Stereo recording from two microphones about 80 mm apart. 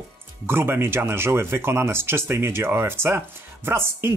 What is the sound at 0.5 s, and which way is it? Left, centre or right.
Speech, right.